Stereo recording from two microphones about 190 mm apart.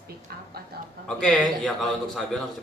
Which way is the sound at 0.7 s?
55° right (ahead or behind).